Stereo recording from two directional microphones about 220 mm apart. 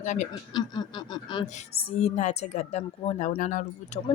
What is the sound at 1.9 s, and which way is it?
Speech, 30° left (ahead or behind).